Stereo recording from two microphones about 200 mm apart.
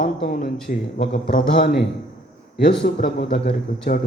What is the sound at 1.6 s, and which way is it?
Speech, 55° left (ahead or behind).